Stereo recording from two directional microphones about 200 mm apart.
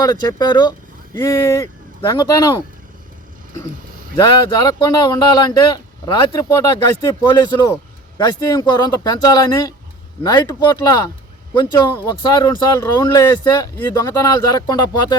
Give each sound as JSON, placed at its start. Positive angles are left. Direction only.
{"t": 0.0, "sound": "speech", "side_deg": 20}
{"t": 4.2, "sound": "speech", "side_deg": 20}
{"t": 12.4, "sound": "speech", "side_deg": 20}